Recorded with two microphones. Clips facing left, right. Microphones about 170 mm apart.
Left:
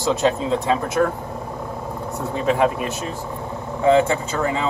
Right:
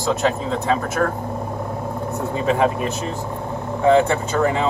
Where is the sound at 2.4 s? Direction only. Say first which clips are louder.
Even; 5° left (ahead or behind).